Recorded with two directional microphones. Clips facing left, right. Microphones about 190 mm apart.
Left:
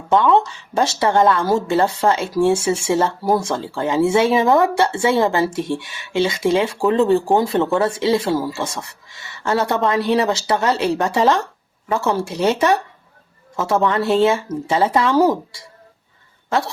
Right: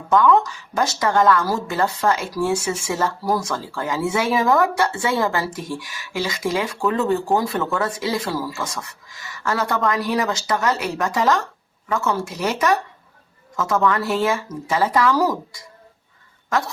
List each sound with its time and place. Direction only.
0.1 s speech: 25° left (ahead or behind)